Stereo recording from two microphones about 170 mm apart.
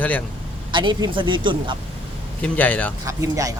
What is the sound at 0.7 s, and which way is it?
Speech, 30° right (ahead or behind).